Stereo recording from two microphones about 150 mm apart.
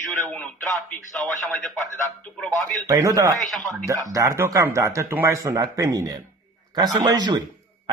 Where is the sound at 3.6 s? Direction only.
20° right (ahead or behind).